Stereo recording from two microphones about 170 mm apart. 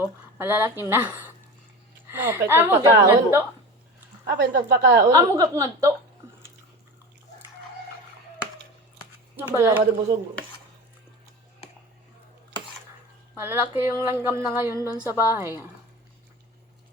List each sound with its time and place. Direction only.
0.0 s a woman's voice: 15° right (ahead or behind)
4.3 s a woman's voice: 85° right
5.1 s speech: 20° right (ahead or behind)
9.3 s speech: 10° right (ahead or behind)
13.3 s speech: 15° right (ahead or behind)